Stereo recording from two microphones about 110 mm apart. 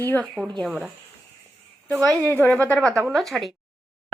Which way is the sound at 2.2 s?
15° left (ahead or behind).